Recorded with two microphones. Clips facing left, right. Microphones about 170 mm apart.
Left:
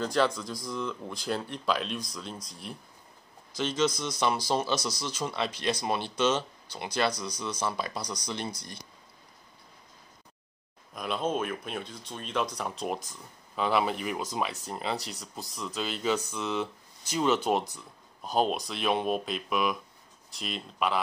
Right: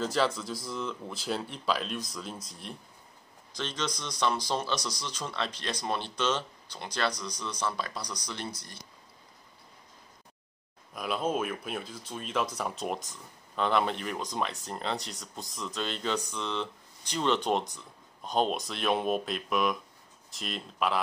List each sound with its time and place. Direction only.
0.0 s speech: centre (ahead or behind); by 8.5 s 15° left (ahead or behind)
11.0 s speech: 5° right (ahead or behind)